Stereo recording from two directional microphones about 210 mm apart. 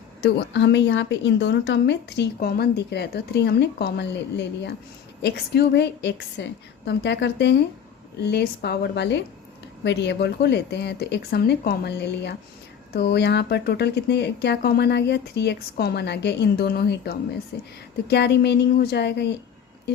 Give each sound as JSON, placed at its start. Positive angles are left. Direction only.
{"t": 0.2, "sound": "speech", "side_deg": 55}